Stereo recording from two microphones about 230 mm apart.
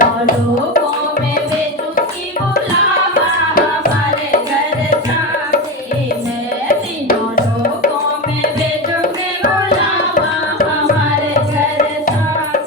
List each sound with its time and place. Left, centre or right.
0.0 s tabla: left
7.1 s music: left